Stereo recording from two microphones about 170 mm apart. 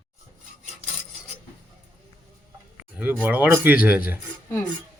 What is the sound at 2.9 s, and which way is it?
Speech, 10° right (ahead or behind).